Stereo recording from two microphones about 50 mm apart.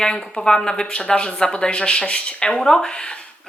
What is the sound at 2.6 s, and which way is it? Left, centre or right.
Speech, centre.